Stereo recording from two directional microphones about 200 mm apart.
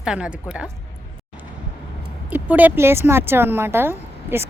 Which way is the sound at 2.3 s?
10° right (ahead or behind).